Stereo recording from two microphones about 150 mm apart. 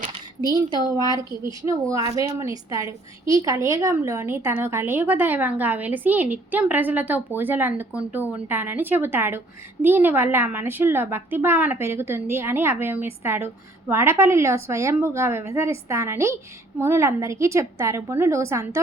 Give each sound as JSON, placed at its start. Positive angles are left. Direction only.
{"t": 0.1, "sound": "a woman's voice", "side_deg": -30}